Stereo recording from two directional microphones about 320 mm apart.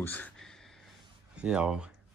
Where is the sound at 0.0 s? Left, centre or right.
Centre.